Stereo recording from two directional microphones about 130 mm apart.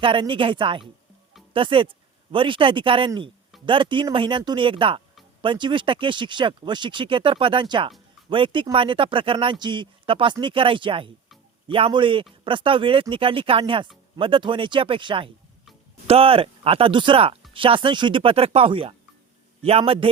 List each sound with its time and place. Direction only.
0.0 s speech: 40° right (ahead or behind)